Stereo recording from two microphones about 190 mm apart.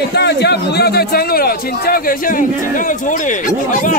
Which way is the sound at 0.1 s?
60° left (ahead or behind).